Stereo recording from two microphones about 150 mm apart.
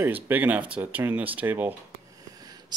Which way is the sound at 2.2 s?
25° right (ahead or behind).